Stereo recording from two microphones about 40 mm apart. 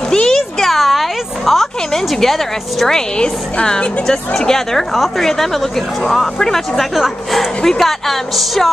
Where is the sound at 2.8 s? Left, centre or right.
Centre.